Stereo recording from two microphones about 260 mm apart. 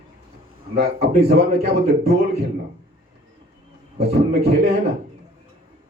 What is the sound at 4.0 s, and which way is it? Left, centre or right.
Speech, right.